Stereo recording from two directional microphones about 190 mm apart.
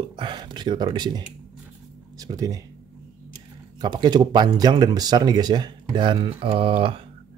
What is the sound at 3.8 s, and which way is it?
Speech, 20° right (ahead or behind).